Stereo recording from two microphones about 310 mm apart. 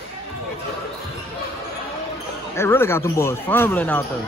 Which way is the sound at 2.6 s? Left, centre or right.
Centre.